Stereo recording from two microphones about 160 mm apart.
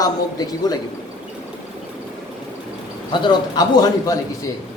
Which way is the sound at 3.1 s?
30° left (ahead or behind).